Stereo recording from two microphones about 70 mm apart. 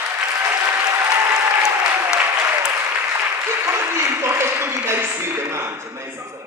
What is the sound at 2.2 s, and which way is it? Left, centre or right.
Applause, right.